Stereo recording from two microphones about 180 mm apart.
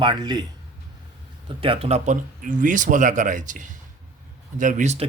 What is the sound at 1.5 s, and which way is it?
Speech, 30° right (ahead or behind).